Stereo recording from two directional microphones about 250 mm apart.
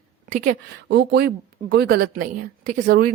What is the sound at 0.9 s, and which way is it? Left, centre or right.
Speech, right.